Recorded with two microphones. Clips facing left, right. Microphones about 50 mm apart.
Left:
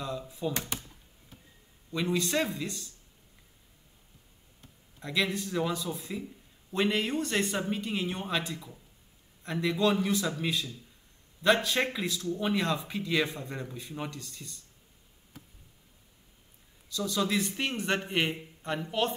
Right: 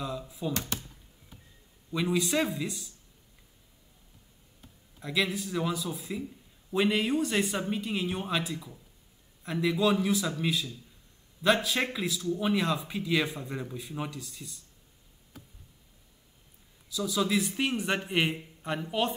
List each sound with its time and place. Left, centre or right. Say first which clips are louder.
0.0 s speech: even; centre
0.5 s speech: right 1 dB; left
1.9 s speech: right 1 dB; centre
5.0 s speech: even; centre
16.9 s speech: right 1 dB; centre